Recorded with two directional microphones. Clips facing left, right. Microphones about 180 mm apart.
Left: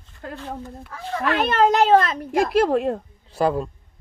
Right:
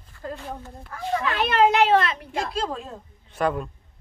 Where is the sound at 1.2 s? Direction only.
50° left (ahead or behind).